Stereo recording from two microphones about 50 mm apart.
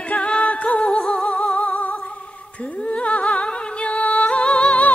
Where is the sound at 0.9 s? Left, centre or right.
Centre.